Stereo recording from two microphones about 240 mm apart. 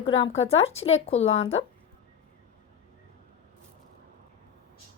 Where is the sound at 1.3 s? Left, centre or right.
Left.